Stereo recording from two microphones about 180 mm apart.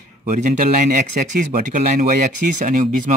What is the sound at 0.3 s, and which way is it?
Speech, 45° right (ahead or behind).